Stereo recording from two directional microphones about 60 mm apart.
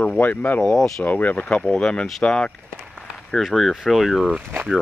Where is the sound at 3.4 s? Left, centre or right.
Centre.